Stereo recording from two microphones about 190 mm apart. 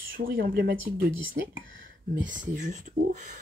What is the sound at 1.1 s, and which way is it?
Speech, 90° right.